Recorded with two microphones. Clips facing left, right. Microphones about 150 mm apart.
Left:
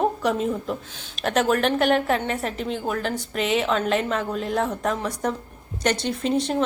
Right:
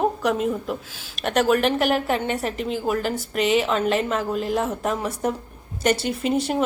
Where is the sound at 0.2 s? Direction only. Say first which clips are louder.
Right 1 dB; centre (ahead or behind).